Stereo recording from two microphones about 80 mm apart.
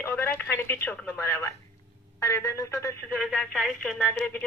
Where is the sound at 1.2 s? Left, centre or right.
Left.